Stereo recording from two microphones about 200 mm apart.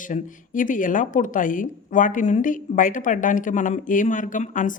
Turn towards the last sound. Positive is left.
turn(degrees=40)  # may be behind; listen again after turning